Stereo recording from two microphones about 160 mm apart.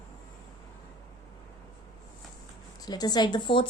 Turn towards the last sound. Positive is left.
turn(degrees=30)  # may be behind; listen again after turning